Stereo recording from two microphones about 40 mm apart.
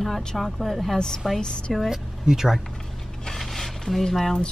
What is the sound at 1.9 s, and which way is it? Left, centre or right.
Speech, centre.